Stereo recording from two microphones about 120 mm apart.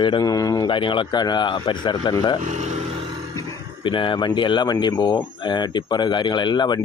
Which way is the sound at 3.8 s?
45° left (ahead or behind).